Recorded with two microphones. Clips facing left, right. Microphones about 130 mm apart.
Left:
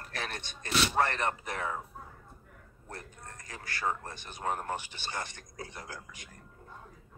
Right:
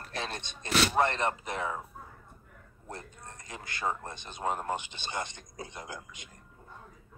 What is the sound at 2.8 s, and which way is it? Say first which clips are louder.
Speech: right 2 dB; 20° right (ahead or behind).